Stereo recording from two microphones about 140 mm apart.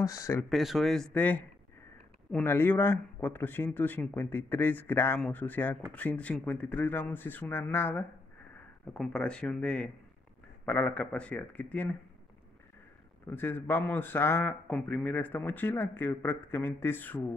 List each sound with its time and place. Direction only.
0.0 s speech: 25° left (ahead or behind)
0.5 s a man's voice: centre (ahead or behind)
13.3 s a man's voice: 15° left (ahead or behind)